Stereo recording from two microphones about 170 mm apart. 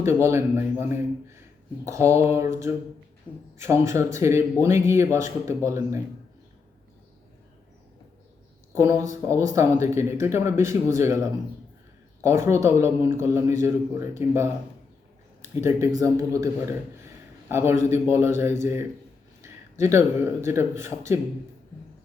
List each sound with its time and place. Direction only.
0.0 s speech: 15° right (ahead or behind)
8.7 s speech: 20° right (ahead or behind)